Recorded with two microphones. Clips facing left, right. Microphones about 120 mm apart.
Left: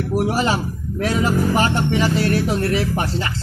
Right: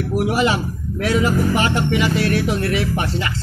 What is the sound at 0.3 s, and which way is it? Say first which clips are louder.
Speech: right 1 dB; 35° left (ahead or behind).